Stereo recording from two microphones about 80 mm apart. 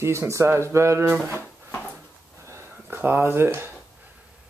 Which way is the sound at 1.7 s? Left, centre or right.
Left.